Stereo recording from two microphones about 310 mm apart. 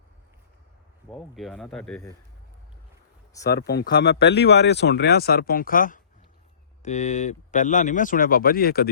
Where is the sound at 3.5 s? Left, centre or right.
Left.